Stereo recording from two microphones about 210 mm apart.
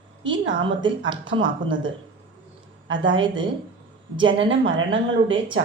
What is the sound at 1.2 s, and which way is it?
A woman's voice, 65° right (ahead or behind).